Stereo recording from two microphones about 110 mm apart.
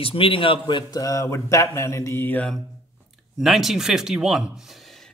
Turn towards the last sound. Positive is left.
turn(degrees=-5)  # may be behind; listen again after turning